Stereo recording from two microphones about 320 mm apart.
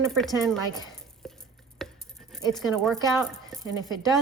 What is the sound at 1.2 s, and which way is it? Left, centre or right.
Chopping, centre.